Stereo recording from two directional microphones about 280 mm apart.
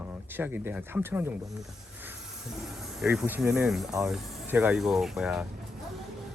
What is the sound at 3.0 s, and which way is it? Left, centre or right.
Speech, centre.